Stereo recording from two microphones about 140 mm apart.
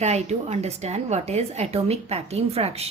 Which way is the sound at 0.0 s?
50° right (ahead or behind).